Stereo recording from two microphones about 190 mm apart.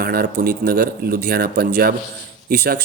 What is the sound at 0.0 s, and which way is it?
Speech, 55° right (ahead or behind).